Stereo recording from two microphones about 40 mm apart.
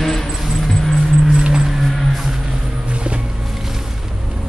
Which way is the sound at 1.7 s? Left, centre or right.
Centre.